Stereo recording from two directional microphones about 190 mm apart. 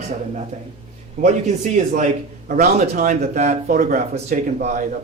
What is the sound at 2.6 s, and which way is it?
Speech, 40° right (ahead or behind).